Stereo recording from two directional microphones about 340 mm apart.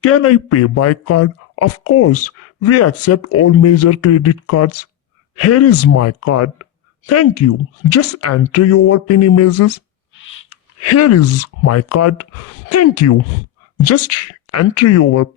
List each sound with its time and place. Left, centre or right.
0.0 s speech: left